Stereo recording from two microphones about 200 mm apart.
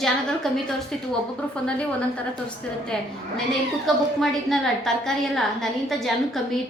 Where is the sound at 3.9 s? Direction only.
Centre (ahead or behind).